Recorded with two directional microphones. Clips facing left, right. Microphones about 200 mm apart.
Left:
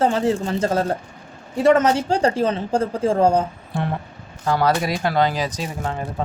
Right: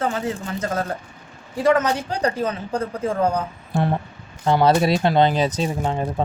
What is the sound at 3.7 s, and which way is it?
Speech, 45° right (ahead or behind).